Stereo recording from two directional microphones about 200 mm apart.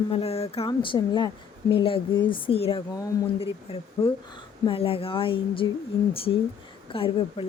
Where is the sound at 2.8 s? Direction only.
15° left (ahead or behind).